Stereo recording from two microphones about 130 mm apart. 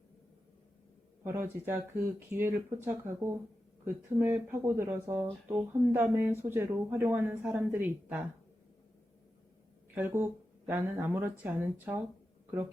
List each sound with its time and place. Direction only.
1.2 s speech: 20° right (ahead or behind)
9.9 s speech: 15° right (ahead or behind)